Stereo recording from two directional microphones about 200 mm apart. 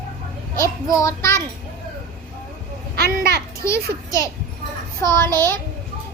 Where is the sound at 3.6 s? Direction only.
15° left (ahead or behind).